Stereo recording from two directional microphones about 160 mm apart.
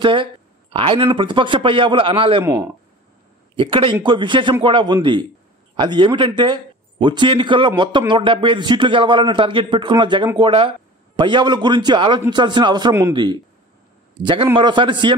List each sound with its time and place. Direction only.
0.0 s a man's voice: 30° right (ahead or behind)
3.5 s a man's voice: 30° right (ahead or behind)